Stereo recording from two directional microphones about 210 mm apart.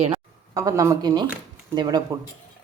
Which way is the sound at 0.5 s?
15° right (ahead or behind).